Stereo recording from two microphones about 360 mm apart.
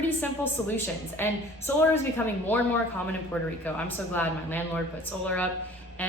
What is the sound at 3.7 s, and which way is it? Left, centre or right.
A woman's voice, centre.